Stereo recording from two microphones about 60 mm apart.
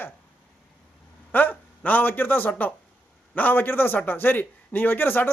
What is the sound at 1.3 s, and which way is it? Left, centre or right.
A man's voice, left.